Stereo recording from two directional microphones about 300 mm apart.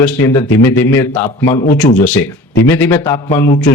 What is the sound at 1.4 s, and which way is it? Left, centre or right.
Speech, centre.